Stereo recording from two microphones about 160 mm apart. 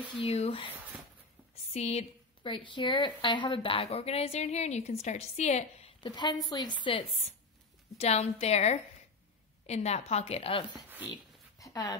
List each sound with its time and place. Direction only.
0.2 s a woman's voice: 40° left (ahead or behind)
6.0 s a woman's voice: 30° left (ahead or behind)
11.1 s a sound: 20° left (ahead or behind)